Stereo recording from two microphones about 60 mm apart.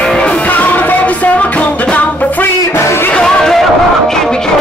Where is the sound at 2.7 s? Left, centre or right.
Left.